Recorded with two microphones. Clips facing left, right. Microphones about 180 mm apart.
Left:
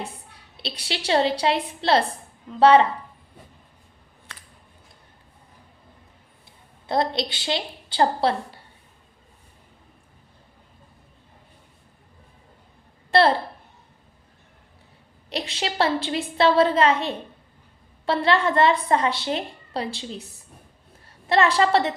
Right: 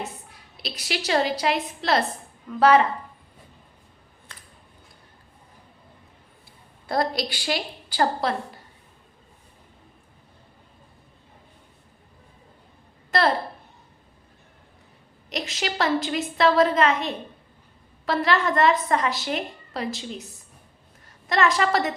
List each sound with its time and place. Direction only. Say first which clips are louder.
0.5 s a woman's voice: right 1 dB; 30° left (ahead or behind)
6.8 s a woman's voice: left 1 dB; 25° left (ahead or behind)
13.1 s a sound: left 4 dB; 30° left (ahead or behind)
15.3 s a woman's voice: left 1 dB; 30° left (ahead or behind)
21.2 s a woman's voice: left 2 dB; 30° left (ahead or behind)